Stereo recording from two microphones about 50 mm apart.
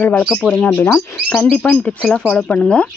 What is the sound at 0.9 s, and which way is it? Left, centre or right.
Speech, centre.